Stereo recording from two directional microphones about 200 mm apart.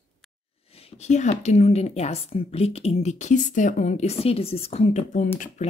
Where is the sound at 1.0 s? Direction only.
35° left (ahead or behind).